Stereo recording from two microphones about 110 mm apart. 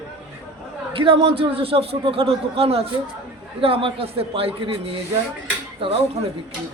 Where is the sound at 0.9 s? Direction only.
55° right (ahead or behind).